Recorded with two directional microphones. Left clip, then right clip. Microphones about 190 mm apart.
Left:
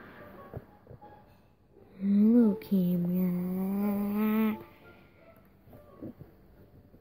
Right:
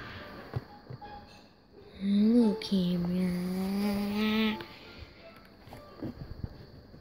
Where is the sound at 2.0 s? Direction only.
10° left (ahead or behind).